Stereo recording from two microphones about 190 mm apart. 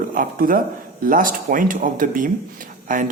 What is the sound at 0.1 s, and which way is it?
Speech, 45° right (ahead or behind).